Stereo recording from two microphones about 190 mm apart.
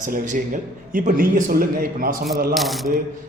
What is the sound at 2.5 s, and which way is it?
Speech, centre (ahead or behind).